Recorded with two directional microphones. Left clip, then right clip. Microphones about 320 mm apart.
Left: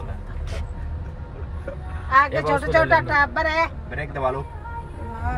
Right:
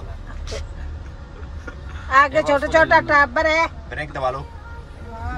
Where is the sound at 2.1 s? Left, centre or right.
Right.